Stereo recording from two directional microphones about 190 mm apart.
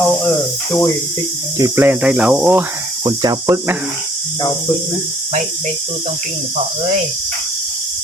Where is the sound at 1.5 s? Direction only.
15° right (ahead or behind).